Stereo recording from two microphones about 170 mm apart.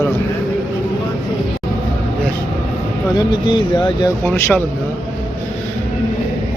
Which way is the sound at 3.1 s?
25° left (ahead or behind).